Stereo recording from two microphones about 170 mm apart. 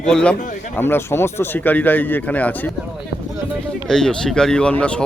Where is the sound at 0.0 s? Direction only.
5° left (ahead or behind).